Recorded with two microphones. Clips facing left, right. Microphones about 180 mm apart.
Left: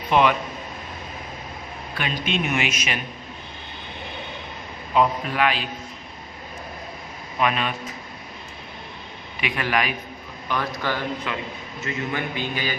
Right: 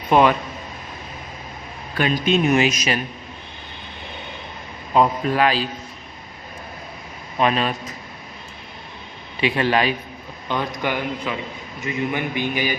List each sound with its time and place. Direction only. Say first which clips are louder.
0.1 s a man's voice: right 3 dB; 40° right (ahead or behind)
2.0 s a man's voice: right 7 dB; 40° right (ahead or behind)
4.9 s a man's voice: right 3 dB; 40° right (ahead or behind)
7.3 s a man's voice: right 4 dB; 35° right (ahead or behind)
9.4 s a man's voice: right 5 dB; 30° right (ahead or behind)
10.5 s a man's voice: right 2 dB; 20° right (ahead or behind)